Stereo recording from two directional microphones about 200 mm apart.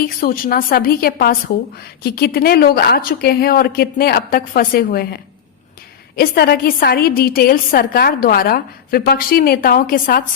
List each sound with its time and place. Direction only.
0.0 s a woman's voice: 45° left (ahead or behind)